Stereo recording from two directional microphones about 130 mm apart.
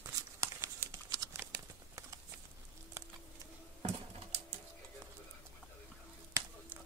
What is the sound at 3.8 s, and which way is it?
Typing, 55° right (ahead or behind).